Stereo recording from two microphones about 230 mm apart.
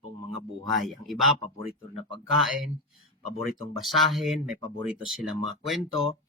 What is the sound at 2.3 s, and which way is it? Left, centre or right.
Speech, centre.